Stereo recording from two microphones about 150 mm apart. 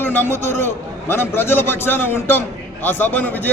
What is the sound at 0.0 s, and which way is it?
A man's voice, 15° left (ahead or behind).